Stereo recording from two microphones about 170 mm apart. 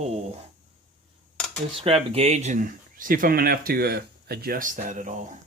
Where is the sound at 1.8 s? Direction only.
35° right (ahead or behind).